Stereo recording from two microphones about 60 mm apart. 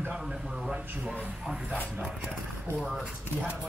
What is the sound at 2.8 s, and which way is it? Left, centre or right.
Speech, centre.